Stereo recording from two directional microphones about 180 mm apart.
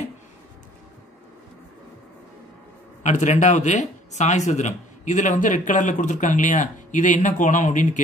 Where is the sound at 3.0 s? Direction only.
40° left (ahead or behind).